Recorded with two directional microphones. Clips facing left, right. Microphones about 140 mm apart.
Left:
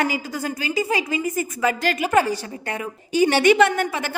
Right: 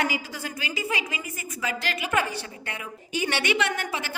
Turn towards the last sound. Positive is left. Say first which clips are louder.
# left 7 dB
turn(degrees=50)  # may be behind; listen again after turning